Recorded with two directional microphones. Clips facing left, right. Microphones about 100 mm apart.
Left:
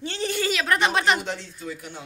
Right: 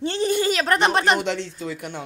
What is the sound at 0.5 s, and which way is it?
Speech, 40° right (ahead or behind).